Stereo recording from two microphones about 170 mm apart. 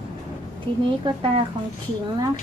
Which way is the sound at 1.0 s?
30° right (ahead or behind).